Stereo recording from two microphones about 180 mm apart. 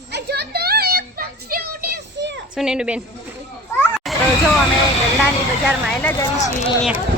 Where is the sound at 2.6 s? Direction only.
5° right (ahead or behind).